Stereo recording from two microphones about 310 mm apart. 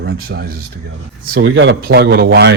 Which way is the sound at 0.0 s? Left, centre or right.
Right.